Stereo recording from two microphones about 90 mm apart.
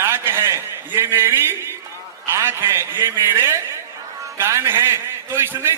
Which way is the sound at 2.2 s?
25° right (ahead or behind).